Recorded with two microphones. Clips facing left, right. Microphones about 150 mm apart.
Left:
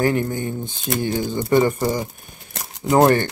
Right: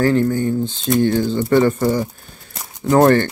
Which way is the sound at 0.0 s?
15° left (ahead or behind).